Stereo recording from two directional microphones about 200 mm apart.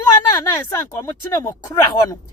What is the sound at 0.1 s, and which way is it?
A woman's voice, 15° left (ahead or behind).